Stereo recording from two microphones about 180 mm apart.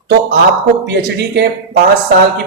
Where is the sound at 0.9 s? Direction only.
70° right (ahead or behind).